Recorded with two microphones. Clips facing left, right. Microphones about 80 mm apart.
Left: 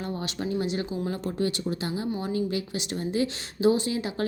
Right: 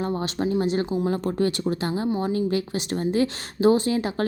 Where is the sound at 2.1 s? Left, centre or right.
Right.